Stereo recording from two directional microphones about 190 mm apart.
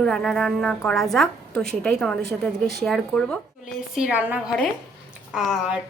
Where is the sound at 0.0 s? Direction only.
Centre (ahead or behind).